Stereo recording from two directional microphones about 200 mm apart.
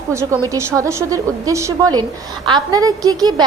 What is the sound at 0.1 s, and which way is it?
A woman's voice, 15° right (ahead or behind).